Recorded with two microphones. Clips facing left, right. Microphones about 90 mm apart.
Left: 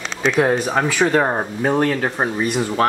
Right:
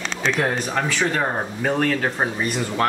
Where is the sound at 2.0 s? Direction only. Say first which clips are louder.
Left 3 dB; 10° left (ahead or behind).